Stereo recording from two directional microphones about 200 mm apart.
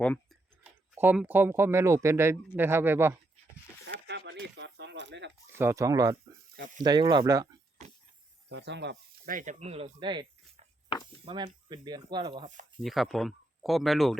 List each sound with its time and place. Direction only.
0.0 s speech: 5° left (ahead or behind)
0.9 s speech: 5° right (ahead or behind)
3.8 s a sound: 60° right (ahead or behind)
5.5 s speech: 15° right (ahead or behind)
8.4 s speech: 60° right (ahead or behind); by 10.7 s 25° right (ahead or behind)
10.8 s a sound: 20° left (ahead or behind)
11.3 s speech: 25° right (ahead or behind)
12.8 s speech: centre (ahead or behind)